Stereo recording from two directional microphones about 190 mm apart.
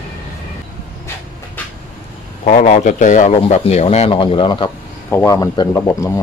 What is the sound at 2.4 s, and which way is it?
Speech, 45° left (ahead or behind).